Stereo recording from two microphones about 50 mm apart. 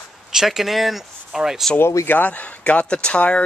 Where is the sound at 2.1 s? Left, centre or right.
Left.